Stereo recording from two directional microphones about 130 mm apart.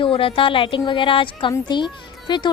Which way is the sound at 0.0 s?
45° left (ahead or behind).